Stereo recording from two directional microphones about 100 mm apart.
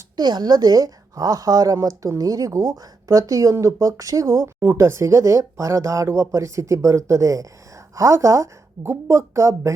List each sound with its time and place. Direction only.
0.2 s a woman's voice: 45° right (ahead or behind)
4.6 s a woman's voice: 25° right (ahead or behind)